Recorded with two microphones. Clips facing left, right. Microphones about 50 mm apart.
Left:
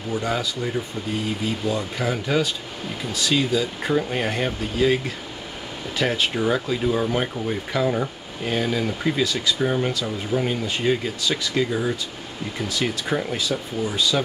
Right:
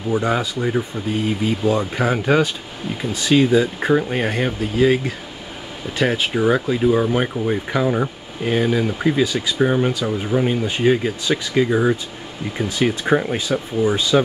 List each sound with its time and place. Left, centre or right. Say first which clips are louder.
0.1 s speech: right 5 dB; right